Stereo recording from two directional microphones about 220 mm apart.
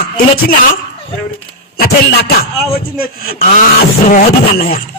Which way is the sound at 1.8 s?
45° left (ahead or behind).